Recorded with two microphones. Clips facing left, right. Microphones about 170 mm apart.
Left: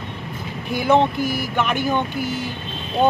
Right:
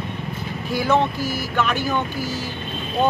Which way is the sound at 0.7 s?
20° left (ahead or behind).